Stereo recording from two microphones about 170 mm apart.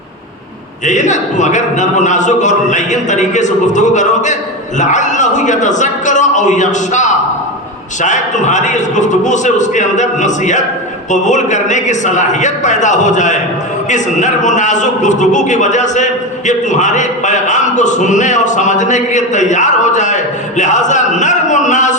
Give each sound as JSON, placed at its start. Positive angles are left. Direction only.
{"t": 0.9, "sound": "speech", "side_deg": 45}